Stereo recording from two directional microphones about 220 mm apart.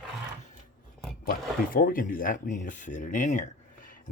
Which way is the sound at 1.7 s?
40° left (ahead or behind).